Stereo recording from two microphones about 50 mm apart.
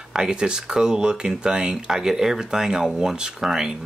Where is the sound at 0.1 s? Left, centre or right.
Centre.